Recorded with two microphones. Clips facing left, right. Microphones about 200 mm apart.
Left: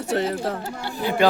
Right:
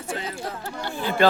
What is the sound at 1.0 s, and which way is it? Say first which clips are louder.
Speech: left 1 dB; 15° left (ahead or behind).